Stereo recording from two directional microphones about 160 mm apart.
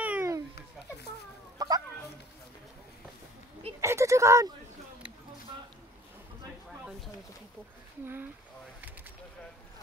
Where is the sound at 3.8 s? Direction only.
20° right (ahead or behind).